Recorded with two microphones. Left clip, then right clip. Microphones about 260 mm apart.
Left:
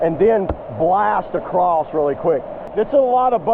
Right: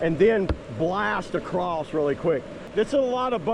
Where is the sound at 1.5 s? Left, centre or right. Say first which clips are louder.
Left 13 dB; right.